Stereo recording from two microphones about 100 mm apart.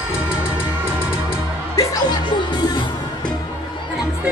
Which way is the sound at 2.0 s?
45° left (ahead or behind).